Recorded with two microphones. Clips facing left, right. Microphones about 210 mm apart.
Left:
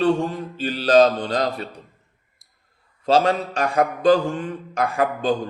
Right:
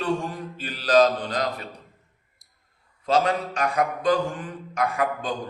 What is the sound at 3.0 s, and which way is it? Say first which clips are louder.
Mantra: left 4 dB; 30° left (ahead or behind).